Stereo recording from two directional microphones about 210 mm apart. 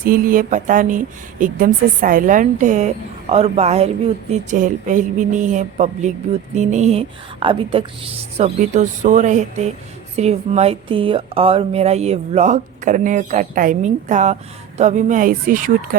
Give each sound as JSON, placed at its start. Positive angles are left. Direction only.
{"t": 0.0, "sound": "speech", "side_deg": -45}